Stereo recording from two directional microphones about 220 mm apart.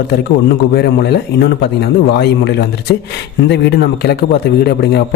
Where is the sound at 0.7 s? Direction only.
50° left (ahead or behind).